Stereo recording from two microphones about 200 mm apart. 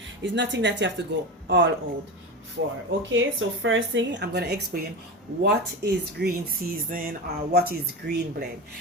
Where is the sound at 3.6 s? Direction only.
70° right (ahead or behind); by 4.9 s 50° right (ahead or behind).